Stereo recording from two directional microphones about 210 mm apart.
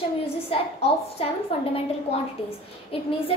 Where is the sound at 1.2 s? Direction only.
30° left (ahead or behind).